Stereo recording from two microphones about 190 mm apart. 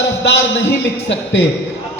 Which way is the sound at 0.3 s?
75° left (ahead or behind).